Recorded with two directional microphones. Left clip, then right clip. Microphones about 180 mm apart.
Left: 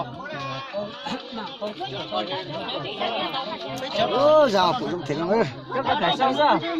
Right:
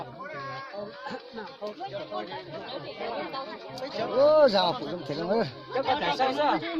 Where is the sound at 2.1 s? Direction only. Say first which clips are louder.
Left 8 dB; 40° right (ahead or behind).